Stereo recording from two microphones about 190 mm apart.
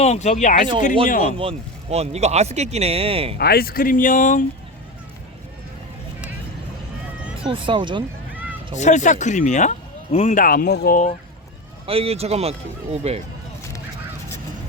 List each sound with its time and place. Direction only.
0.0 s speech: 35° left (ahead or behind)
1.4 s speech: 30° right (ahead or behind)
3.3 s speech: 55° left (ahead or behind)
7.3 s speech: 25° right (ahead or behind)
8.8 s speech: 40° left (ahead or behind)
11.9 s speech: 30° right (ahead or behind)